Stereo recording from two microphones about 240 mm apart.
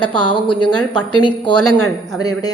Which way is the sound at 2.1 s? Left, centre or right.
Centre.